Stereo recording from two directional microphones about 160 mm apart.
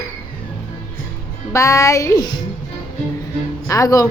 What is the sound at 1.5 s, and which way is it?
Speech, 20° left (ahead or behind).